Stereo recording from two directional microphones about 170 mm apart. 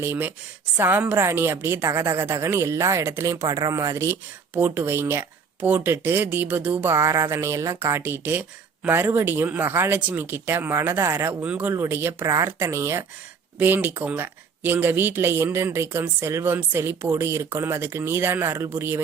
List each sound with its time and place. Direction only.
0.0 s speech: 10° right (ahead or behind)